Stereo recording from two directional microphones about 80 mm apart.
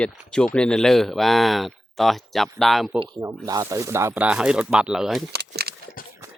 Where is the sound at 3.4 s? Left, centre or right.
Right.